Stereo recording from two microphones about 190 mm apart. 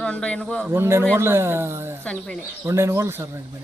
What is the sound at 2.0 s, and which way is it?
Speech, 5° left (ahead or behind).